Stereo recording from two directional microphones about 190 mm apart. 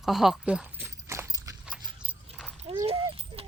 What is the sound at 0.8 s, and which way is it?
Horse, 15° right (ahead or behind).